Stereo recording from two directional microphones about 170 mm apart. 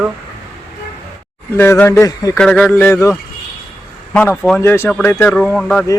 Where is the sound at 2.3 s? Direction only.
5° left (ahead or behind).